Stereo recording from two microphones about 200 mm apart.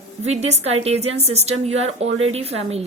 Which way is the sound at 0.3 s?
35° right (ahead or behind).